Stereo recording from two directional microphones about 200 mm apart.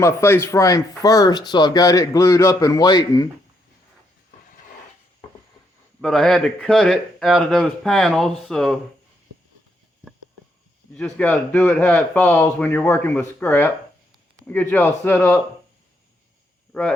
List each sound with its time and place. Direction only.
0.0 s speech: 15° left (ahead or behind)
6.0 s speech: 5° left (ahead or behind)
10.9 s speech: 5° left (ahead or behind)